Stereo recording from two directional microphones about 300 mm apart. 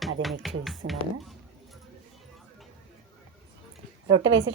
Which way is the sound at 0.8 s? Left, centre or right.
Right.